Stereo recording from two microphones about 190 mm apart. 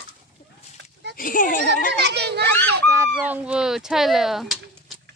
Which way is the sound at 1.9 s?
60° right (ahead or behind).